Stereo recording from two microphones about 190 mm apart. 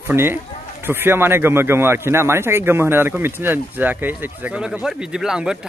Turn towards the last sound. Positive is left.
turn(degrees=-5)  # may be behind; listen again after turning